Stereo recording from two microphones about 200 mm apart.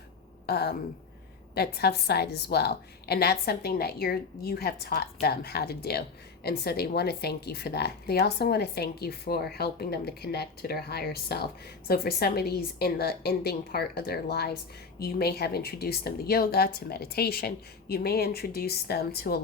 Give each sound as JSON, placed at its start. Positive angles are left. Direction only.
{"t": 0.4, "sound": "a woman's voice", "side_deg": 50}